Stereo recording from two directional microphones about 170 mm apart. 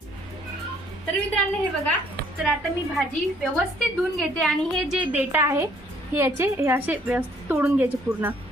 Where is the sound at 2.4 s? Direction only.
5° right (ahead or behind).